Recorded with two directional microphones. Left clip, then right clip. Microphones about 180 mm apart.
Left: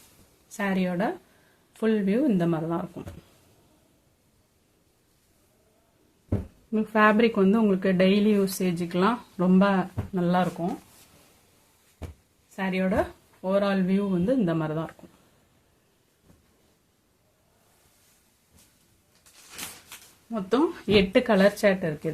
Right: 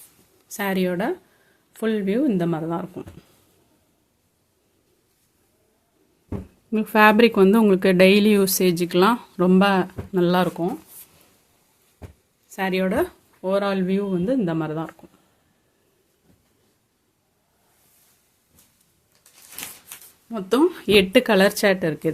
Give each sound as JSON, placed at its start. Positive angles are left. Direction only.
{"t": 0.4, "sound": "speech", "side_deg": -55}
{"t": 6.7, "sound": "a woman's voice", "side_deg": -55}
{"t": 12.5, "sound": "speech", "side_deg": -60}
{"t": 20.3, "sound": "speech", "side_deg": -45}